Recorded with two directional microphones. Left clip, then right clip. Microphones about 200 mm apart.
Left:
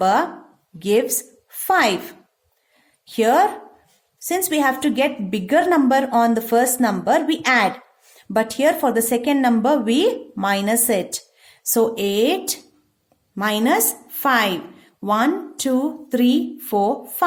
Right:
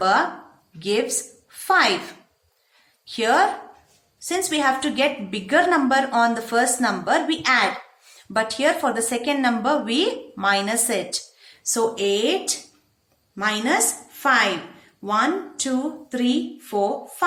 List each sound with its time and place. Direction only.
0.0 s a woman's voice: 50° left (ahead or behind)
3.1 s a woman's voice: 45° left (ahead or behind)